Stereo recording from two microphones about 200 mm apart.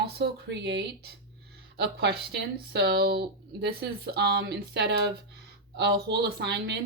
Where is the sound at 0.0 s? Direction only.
60° right (ahead or behind).